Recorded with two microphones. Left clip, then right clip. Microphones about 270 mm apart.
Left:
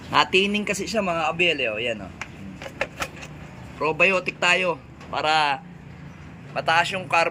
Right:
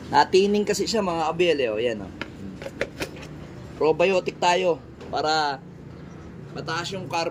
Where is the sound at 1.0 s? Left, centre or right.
Centre.